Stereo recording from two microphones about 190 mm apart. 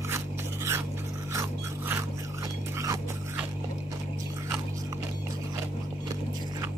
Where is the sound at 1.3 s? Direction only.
15° right (ahead or behind).